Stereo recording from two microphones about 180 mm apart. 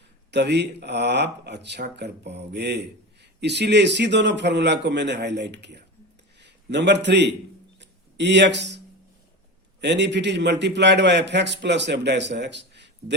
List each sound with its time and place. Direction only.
0.3 s a man's voice: 70° right (ahead or behind)
7.8 s a sound: 75° right (ahead or behind)
9.8 s speech: 75° right (ahead or behind)